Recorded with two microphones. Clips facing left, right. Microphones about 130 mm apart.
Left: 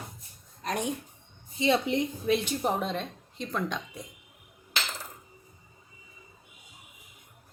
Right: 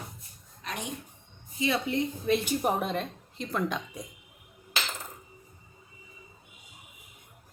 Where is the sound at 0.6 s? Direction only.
45° left (ahead or behind).